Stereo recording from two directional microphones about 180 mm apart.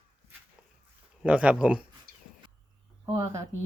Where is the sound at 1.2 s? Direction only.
5° right (ahead or behind).